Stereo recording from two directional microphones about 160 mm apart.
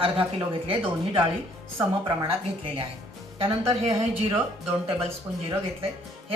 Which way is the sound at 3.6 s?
20° right (ahead or behind).